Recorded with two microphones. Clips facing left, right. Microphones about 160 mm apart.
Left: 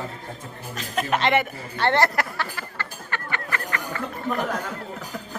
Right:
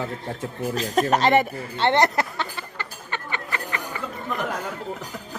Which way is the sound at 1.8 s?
20° right (ahead or behind).